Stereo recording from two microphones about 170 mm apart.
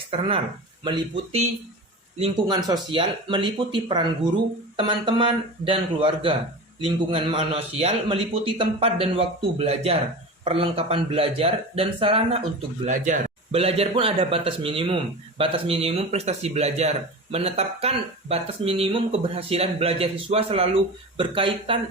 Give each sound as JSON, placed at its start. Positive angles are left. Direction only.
{"t": 0.1, "sound": "speech", "side_deg": -30}
{"t": 2.5, "sound": "speech", "side_deg": -20}
{"t": 12.8, "sound": "speech", "side_deg": -45}